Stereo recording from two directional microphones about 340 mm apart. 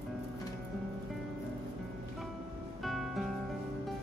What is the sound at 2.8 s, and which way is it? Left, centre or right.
Music, centre.